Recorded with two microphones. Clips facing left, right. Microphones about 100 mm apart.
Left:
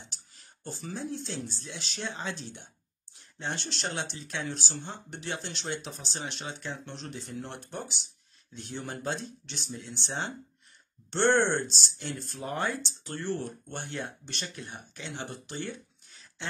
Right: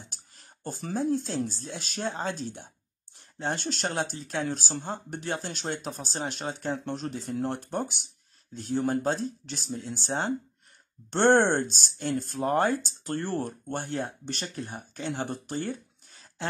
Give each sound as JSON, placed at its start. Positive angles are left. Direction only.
{"t": 0.0, "sound": "speech", "side_deg": -50}